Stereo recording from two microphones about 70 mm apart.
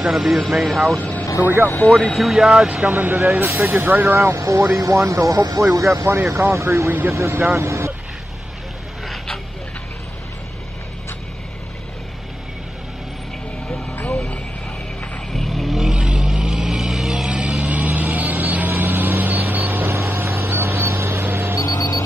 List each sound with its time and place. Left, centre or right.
0.0 s speech: centre
0.9 s speech: centre
2.1 s speech: centre
2.9 s speech: right
4.4 s speech: right
6.9 s speech: right
7.2 s speech: right
9.0 s boat: centre
14.0 s vehicle: centre
15.3 s vehicle: centre
16.0 s vehicle: centre; by 21.5 s right
21.7 s a sound: left